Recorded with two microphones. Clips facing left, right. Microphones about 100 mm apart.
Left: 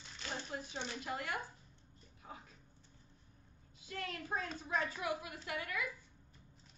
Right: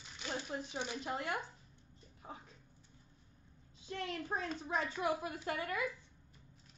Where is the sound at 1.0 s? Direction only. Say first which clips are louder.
Right 1 dB; 25° right (ahead or behind).